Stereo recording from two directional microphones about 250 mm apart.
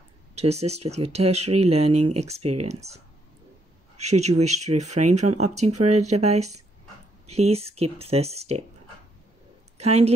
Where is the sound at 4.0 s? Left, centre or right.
Right.